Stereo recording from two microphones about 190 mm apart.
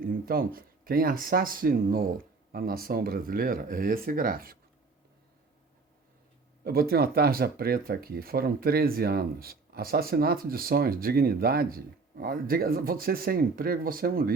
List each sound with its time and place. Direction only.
0.0 s speech: 50° right (ahead or behind)
6.7 s speech: 55° right (ahead or behind)